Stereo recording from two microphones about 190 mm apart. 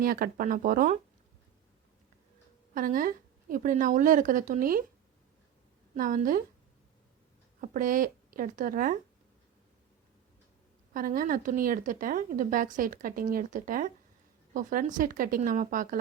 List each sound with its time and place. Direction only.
0.0 s a woman's voice: 50° right (ahead or behind)
2.7 s a woman's voice: 45° right (ahead or behind)
5.9 s a woman's voice: 45° right (ahead or behind)
7.6 s a woman's voice: 45° right (ahead or behind)
10.9 s a woman's voice: 45° right (ahead or behind)